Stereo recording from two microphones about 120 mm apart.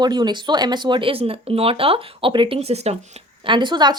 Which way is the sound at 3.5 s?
40° right (ahead or behind).